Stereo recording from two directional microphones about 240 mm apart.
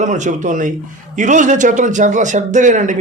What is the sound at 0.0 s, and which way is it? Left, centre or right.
A man's voice, right.